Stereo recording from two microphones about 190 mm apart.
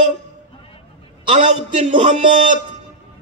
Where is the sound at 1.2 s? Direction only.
35° right (ahead or behind).